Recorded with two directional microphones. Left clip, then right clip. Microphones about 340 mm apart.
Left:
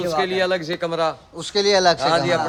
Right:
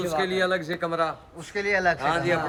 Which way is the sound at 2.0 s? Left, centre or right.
Left.